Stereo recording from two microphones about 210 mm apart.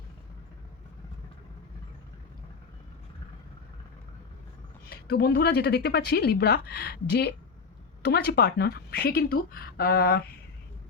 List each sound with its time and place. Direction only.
4.9 s a woman's voice: 50° left (ahead or behind)